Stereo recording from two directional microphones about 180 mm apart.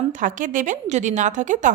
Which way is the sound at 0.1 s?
45° right (ahead or behind).